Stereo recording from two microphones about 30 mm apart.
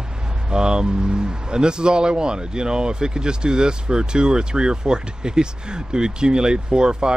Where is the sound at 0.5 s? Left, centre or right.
Right.